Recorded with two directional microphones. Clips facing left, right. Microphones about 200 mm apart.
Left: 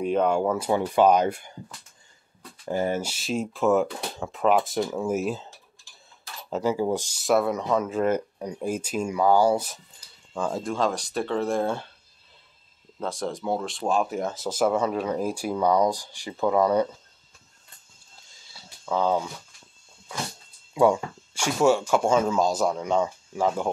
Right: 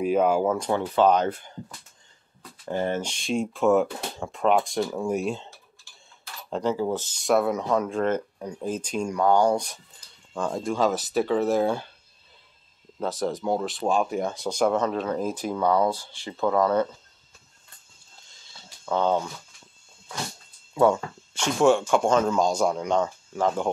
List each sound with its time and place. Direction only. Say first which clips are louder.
0.0 s speech: right 1 dB; 5° right (ahead or behind)
0.6 s speech: left 1 dB; 10° left (ahead or behind)
2.7 s speech: left 1 dB; 10° left (ahead or behind)
6.5 s speech: left 1 dB; 10° left (ahead or behind)
7.2 s speech: even; centre (ahead or behind)
13.0 s speech: right 2 dB; centre (ahead or behind)
18.5 s a sound: right 1 dB; 5° left (ahead or behind)
20.7 s speech: even; 15° left (ahead or behind)